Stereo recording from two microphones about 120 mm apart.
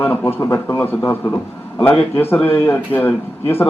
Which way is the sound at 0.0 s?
15° left (ahead or behind).